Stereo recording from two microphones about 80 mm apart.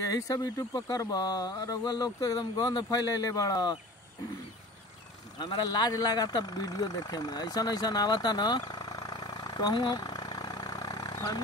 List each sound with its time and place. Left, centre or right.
0.1 s speech: left
5.4 s speech: left